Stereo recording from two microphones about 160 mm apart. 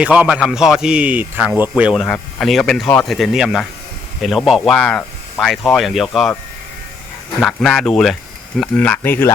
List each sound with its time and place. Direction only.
0.0 s a man's voice: 5° right (ahead or behind)
7.4 s a man's voice: centre (ahead or behind)